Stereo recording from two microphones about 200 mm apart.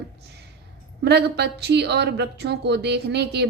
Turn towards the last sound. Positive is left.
turn(degrees=-55)  # may be behind; listen again after turning